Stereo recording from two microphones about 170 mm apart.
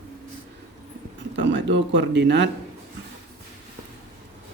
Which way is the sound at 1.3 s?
90° right.